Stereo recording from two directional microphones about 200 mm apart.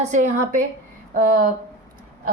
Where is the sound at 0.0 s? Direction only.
35° right (ahead or behind).